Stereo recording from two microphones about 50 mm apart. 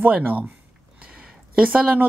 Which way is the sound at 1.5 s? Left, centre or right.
Right.